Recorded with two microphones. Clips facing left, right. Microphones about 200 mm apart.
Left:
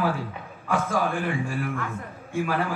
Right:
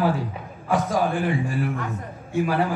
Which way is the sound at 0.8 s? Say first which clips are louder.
Right 2 dB; 40° right (ahead or behind).